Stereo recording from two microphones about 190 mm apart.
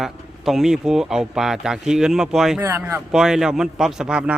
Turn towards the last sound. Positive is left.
turn(degrees=-5)  # may be behind; listen again after turning